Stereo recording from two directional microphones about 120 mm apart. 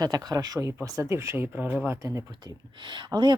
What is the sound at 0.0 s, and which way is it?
Speech, 30° right (ahead or behind).